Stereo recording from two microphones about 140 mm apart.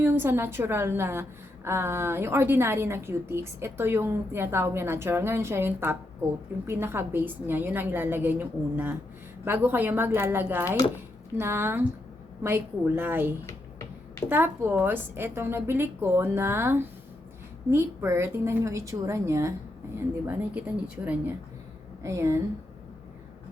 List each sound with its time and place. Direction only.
0.0 s a woman's voice: 15° right (ahead or behind)
13.5 s a sound: 20° left (ahead or behind)
14.3 s a woman's voice: 15° right (ahead or behind)